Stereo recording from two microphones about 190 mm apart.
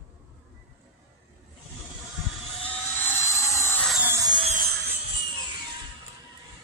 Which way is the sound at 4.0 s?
15° right (ahead or behind).